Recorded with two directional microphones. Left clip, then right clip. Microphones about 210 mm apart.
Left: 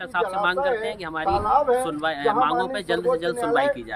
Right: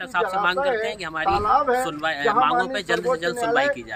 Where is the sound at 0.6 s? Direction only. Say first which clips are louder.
Right 1 dB; 30° right (ahead or behind).